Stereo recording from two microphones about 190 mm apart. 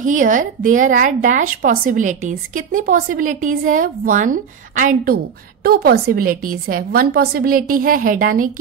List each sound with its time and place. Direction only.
0.0 s a woman's voice: 45° right (ahead or behind)